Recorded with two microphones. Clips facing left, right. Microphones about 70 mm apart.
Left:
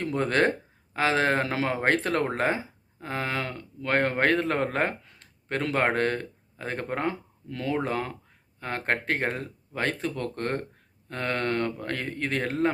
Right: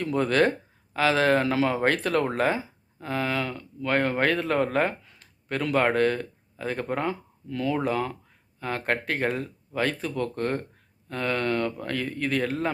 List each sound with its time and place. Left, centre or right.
0.0 s speech: left